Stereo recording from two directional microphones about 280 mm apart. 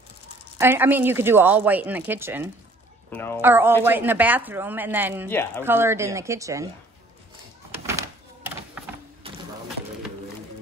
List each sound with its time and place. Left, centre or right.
0.6 s speech: centre
3.1 s a woman's voice: centre
3.3 s speech: centre
5.3 s speech: centre
5.6 s speech: centre
9.2 s a sound: centre